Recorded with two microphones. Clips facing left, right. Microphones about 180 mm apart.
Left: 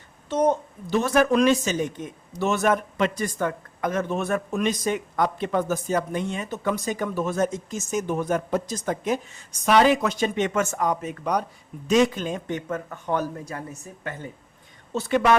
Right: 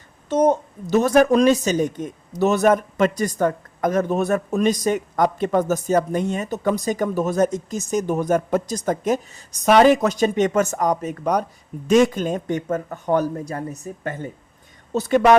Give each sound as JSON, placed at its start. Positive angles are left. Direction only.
{"t": 0.3, "sound": "speech", "side_deg": -40}
{"t": 14.9, "sound": "speech", "side_deg": -45}